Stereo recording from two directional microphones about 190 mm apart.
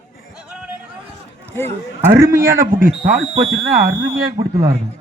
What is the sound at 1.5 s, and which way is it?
Speech, 10° left (ahead or behind).